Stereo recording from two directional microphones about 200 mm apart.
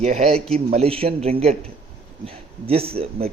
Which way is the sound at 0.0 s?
35° right (ahead or behind).